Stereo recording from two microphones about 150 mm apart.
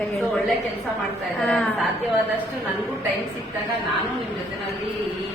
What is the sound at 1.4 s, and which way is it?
Speech, 5° left (ahead or behind).